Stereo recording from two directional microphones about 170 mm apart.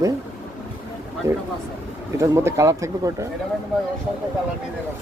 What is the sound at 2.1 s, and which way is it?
Speech, 15° right (ahead or behind).